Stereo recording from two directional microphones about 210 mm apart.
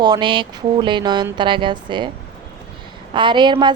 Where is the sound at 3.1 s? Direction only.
20° right (ahead or behind).